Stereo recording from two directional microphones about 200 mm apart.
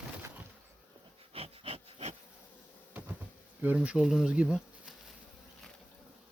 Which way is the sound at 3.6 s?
5° right (ahead or behind).